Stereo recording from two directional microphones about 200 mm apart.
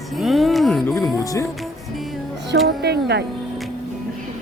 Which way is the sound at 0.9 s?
15° left (ahead or behind).